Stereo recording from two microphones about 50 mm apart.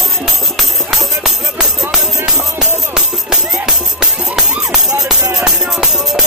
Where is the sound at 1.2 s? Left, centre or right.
Centre.